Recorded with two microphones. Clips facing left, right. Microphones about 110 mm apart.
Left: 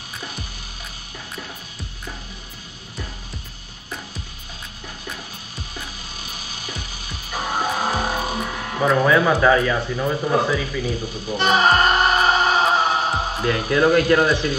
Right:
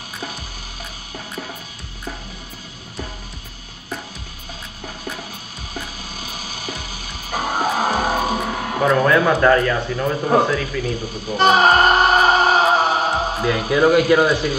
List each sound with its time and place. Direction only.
7.2 s music: 45° right (ahead or behind)
8.8 s speech: 5° left (ahead or behind)
11.3 s a sound: 45° right (ahead or behind)
13.4 s speech: 5° right (ahead or behind)